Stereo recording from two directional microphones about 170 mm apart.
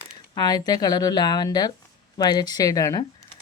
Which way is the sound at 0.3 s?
20° left (ahead or behind).